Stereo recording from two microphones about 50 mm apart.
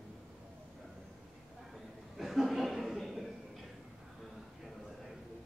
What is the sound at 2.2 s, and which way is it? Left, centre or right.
Chuckle, centre.